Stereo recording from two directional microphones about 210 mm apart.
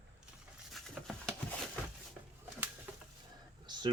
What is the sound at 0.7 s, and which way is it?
Patter, centre (ahead or behind).